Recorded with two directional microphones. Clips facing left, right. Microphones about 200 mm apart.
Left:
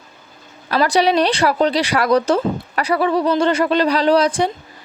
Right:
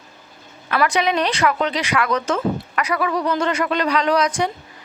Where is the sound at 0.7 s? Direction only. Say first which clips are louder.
Left 4 dB; 35° left (ahead or behind).